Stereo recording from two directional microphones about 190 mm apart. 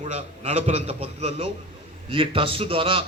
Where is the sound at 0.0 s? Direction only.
35° right (ahead or behind).